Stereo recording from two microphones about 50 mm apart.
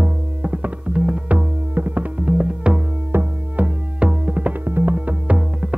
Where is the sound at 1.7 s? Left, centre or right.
Right.